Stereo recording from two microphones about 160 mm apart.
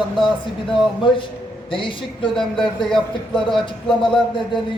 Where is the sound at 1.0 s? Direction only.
30° left (ahead or behind).